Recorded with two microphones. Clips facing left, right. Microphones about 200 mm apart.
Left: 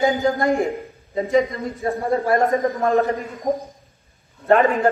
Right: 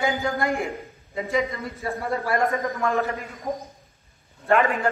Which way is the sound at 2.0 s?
30° left (ahead or behind).